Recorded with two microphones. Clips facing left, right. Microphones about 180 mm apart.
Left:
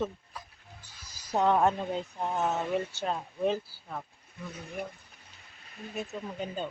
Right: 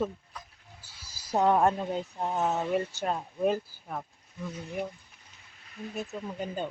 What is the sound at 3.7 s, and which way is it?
Speech, 15° right (ahead or behind).